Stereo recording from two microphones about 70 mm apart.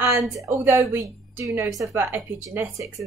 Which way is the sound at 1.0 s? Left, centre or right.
Right.